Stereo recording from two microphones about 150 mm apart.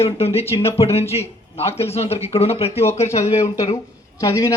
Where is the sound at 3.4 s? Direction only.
25° left (ahead or behind).